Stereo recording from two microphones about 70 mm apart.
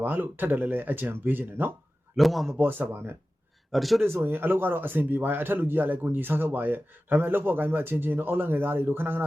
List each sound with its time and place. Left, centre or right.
0.0 s speech: right
2.1 s a man's voice: centre
2.6 s a man's voice: right
3.7 s a man's voice: centre
4.0 s a man's voice: right